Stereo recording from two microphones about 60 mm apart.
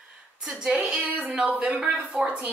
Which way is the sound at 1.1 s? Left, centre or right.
Right.